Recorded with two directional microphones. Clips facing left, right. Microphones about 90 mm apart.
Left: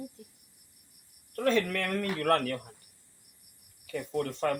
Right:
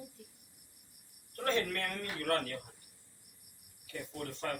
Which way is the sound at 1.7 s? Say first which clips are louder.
Left 7 dB; 75° left (ahead or behind).